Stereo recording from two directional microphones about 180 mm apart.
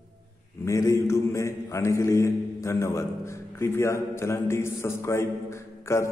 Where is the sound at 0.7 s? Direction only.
15° left (ahead or behind).